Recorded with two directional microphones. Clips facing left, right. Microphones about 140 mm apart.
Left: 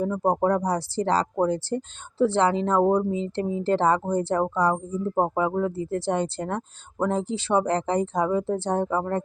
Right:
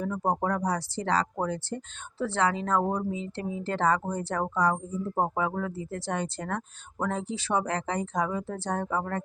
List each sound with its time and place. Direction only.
0.0 s speech: 30° left (ahead or behind)